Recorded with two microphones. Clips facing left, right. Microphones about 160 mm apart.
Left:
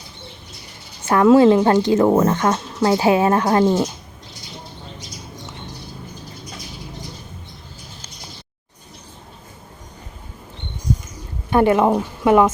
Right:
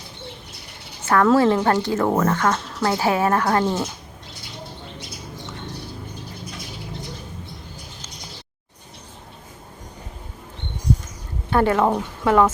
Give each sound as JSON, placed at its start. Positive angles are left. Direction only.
{"t": 1.0, "sound": "a woman's voice", "side_deg": 15}
{"t": 11.5, "sound": "speech", "side_deg": 15}